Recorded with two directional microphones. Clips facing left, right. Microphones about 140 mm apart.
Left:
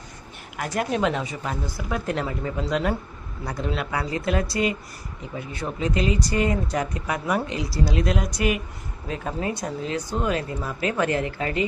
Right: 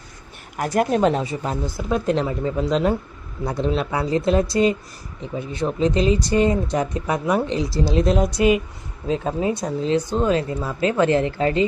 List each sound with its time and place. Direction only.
0.5 s speech: 40° right (ahead or behind)